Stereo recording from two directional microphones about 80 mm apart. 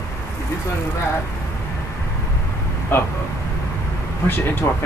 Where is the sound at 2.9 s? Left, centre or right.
Left.